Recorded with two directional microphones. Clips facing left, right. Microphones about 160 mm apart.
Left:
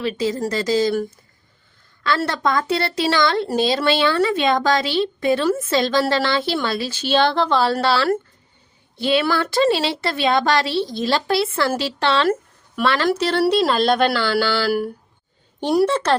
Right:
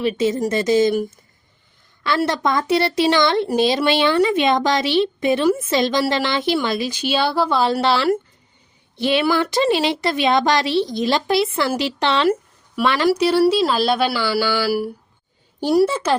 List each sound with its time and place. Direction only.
0.0 s a woman's voice: 20° right (ahead or behind); by 16.1 s 5° right (ahead or behind)